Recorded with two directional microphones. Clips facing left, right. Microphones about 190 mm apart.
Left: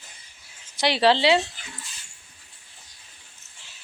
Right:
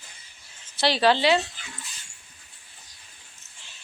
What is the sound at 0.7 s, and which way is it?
Speech, 20° left (ahead or behind).